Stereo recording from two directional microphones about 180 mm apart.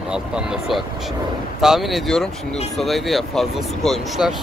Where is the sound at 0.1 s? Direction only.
5° right (ahead or behind).